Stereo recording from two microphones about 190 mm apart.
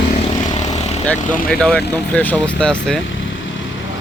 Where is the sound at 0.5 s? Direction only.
35° left (ahead or behind).